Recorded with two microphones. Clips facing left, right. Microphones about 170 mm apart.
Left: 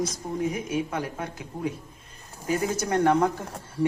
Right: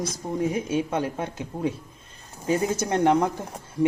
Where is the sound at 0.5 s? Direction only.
25° right (ahead or behind).